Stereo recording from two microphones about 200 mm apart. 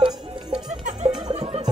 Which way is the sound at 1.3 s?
30° right (ahead or behind).